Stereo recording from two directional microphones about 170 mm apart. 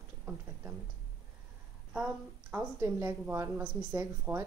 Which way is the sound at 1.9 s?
10° right (ahead or behind).